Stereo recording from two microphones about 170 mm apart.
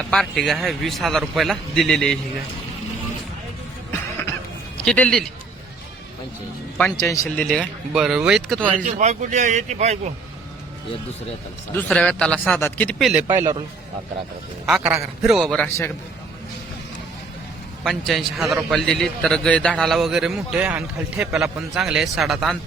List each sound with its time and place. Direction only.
0.0 s a man's voice: 5° left (ahead or behind)
4.9 s a man's voice: 5° left (ahead or behind)
7.0 s speech: 20° left (ahead or behind)
7.3 s a man's voice: 5° left (ahead or behind)
8.7 s a man's voice: 45° right (ahead or behind)
11.7 s a man's voice: 10° left (ahead or behind)
13.0 s a man's voice: centre (ahead or behind)
13.2 s a man's voice: 15° right (ahead or behind)
14.8 s a man's voice: 5° right (ahead or behind)
17.8 s a man's voice: centre (ahead or behind)